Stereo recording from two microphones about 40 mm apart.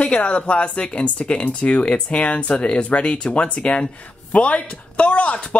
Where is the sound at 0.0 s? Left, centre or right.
Left.